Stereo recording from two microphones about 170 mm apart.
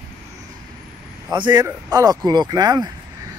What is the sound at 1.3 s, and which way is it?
Speech, 25° right (ahead or behind).